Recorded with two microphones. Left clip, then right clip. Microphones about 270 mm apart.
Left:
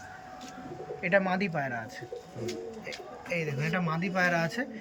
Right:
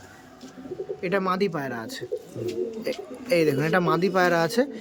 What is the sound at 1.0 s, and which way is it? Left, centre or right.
Speech, centre.